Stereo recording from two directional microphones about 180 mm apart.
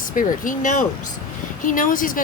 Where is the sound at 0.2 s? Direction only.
45° left (ahead or behind).